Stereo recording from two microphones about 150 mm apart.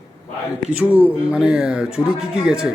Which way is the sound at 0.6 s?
10° right (ahead or behind).